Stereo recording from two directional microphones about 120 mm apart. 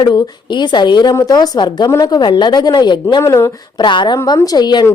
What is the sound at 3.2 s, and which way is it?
Speech, 25° left (ahead or behind).